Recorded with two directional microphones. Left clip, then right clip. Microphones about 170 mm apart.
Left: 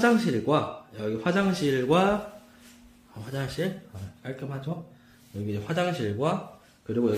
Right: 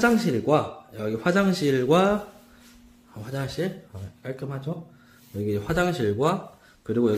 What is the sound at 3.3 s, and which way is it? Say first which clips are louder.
A man's voice: right 2 dB; 15° right (ahead or behind).